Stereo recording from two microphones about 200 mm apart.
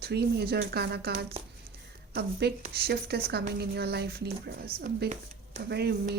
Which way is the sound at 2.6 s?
55° right (ahead or behind).